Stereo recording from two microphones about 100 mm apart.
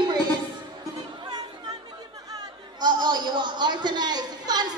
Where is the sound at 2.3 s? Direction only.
45° right (ahead or behind).